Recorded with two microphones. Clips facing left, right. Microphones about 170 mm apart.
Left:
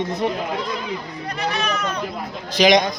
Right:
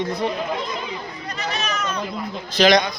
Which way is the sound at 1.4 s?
60° left (ahead or behind).